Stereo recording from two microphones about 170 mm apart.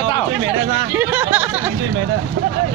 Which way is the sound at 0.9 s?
10° right (ahead or behind).